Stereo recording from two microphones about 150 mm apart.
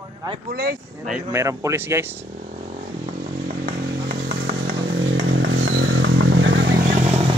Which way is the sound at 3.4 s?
75° right (ahead or behind).